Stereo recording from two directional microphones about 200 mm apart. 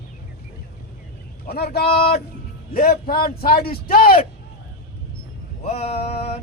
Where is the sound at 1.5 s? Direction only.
50° left (ahead or behind).